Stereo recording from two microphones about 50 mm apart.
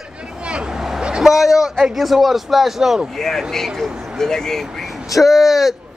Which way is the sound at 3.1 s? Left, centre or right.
Centre.